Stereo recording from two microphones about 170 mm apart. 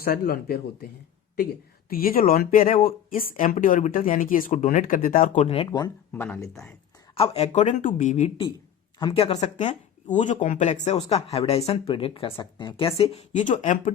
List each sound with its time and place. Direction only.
0.0 s speech: 65° left (ahead or behind)
1.9 s speech: 60° left (ahead or behind)
5.5 s speech: 25° left (ahead or behind)
6.1 s speech: 10° left (ahead or behind)
7.1 s speech: 35° left (ahead or behind)
9.0 s speech: 30° left (ahead or behind); by 13.9 s 45° left (ahead or behind)